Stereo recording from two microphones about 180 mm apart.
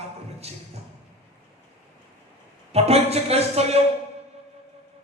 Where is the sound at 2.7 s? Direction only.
35° right (ahead or behind).